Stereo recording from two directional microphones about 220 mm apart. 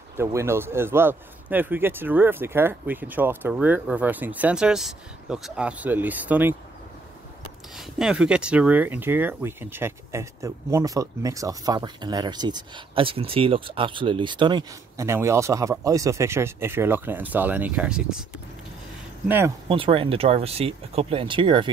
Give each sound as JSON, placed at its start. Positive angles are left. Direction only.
{"t": 0.2, "sound": "speech", "side_deg": -10}
{"t": 7.7, "sound": "speech", "side_deg": 0}
{"t": 19.2, "sound": "speech", "side_deg": -10}
{"t": 19.7, "sound": "speech", "side_deg": -25}